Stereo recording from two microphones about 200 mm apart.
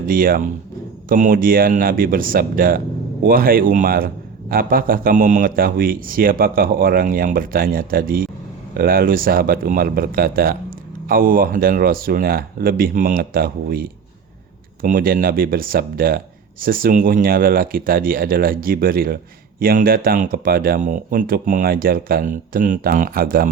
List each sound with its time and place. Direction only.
0.0 s speech: 45° right (ahead or behind)